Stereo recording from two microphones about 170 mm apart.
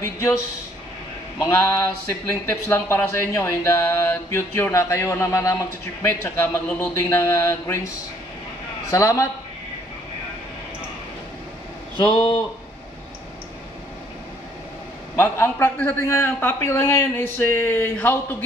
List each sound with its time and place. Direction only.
1.4 s speech: 15° left (ahead or behind)
8.9 s speech: 20° left (ahead or behind)
12.0 s speech: 30° left (ahead or behind)
15.1 s speech: 15° left (ahead or behind)